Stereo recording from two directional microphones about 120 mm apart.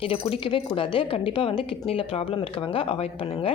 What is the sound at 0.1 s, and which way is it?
A woman's voice, 50° left (ahead or behind).